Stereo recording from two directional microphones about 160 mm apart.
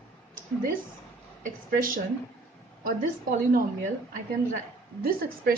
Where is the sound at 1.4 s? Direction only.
60° right (ahead or behind).